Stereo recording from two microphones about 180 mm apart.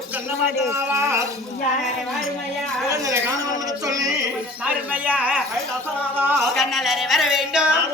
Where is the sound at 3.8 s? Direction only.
20° right (ahead or behind).